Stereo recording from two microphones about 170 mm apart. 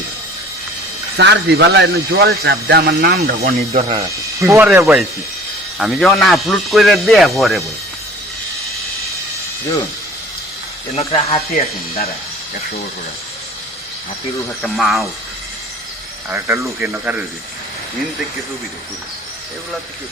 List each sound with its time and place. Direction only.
1.1 s speech: 85° right; by 3.5 s 65° right (ahead or behind)
3.7 s speech: 35° right (ahead or behind)
3.9 s speech: 20° right (ahead or behind); by 7.6 s centre (ahead or behind)
10.9 s speech: 35° left (ahead or behind)
14.6 s speech: centre (ahead or behind)
16.3 s speech: 10° right (ahead or behind)